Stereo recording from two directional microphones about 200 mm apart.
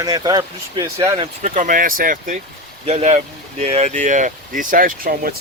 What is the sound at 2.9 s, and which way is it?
Speech, 35° right (ahead or behind).